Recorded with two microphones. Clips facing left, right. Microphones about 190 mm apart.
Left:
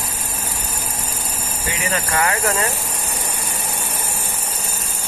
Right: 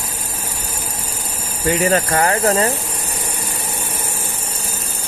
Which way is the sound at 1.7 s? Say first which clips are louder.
Right 9 dB; 40° right (ahead or behind).